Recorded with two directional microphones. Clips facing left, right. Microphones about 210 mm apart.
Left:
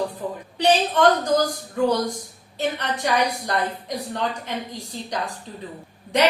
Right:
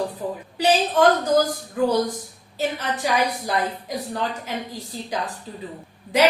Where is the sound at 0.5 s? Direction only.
5° right (ahead or behind).